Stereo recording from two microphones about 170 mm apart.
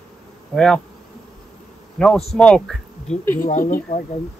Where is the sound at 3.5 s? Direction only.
55° left (ahead or behind).